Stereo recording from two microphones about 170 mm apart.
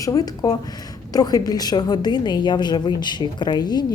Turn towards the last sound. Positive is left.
turn(degrees=25)  # may be behind; listen again after turning